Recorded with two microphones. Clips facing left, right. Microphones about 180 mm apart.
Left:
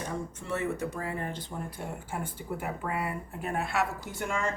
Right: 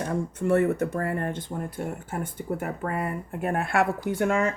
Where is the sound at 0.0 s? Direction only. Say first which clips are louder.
Right 9 dB; 60° right (ahead or behind).